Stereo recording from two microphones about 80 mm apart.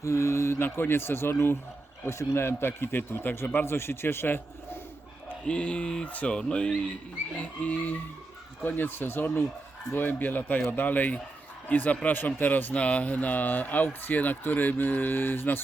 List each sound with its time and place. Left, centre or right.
0.0 s speech: left
5.3 s speech: centre